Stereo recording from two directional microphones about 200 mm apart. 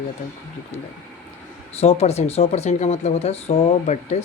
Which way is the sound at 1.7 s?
30° left (ahead or behind).